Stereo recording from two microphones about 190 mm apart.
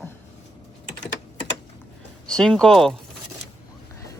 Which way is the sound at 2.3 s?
5° left (ahead or behind).